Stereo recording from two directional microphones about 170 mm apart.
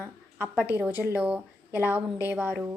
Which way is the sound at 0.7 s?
10° right (ahead or behind).